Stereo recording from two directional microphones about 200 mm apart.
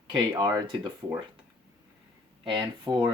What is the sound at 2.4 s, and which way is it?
Speech, 20° right (ahead or behind).